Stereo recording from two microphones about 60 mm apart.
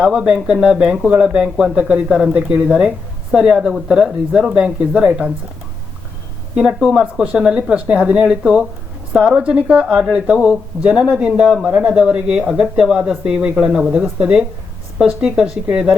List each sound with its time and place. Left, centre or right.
0.0 s speech: centre
3.8 s speech: centre
6.6 s speech: centre